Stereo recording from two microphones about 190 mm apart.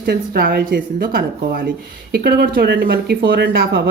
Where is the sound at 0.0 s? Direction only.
55° right (ahead or behind).